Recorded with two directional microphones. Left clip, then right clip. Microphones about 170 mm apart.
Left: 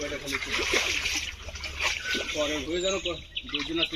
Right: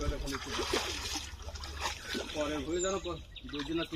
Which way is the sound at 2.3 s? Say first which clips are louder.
Left 6 dB; 25° right (ahead or behind).